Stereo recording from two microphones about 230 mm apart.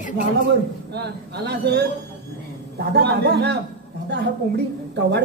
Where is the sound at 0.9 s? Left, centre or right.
Right.